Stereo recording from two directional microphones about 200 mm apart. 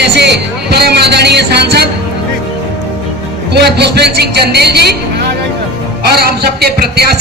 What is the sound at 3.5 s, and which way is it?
Speech, 55° right (ahead or behind).